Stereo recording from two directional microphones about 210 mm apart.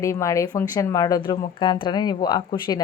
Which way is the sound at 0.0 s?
15° left (ahead or behind).